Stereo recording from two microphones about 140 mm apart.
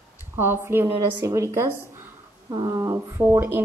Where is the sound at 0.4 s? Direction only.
15° right (ahead or behind).